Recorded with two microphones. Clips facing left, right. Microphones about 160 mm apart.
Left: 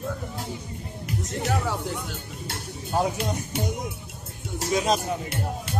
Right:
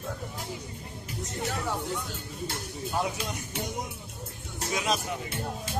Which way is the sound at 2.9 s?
40° left (ahead or behind).